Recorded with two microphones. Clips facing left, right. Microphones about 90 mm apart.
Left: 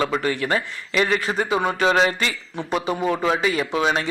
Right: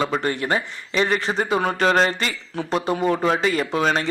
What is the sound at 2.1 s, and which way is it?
Speech, 45° right (ahead or behind).